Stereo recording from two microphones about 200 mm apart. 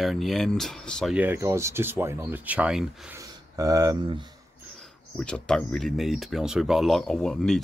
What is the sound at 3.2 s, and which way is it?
Speech, 15° right (ahead or behind).